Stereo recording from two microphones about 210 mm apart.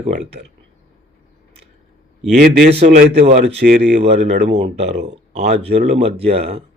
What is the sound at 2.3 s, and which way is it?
A man's voice, 45° right (ahead or behind).